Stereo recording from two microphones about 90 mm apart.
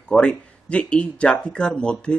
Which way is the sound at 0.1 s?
10° left (ahead or behind).